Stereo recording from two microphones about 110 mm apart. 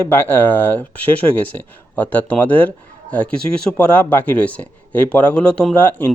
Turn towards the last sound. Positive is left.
turn(degrees=15)  # may be behind; listen again after turning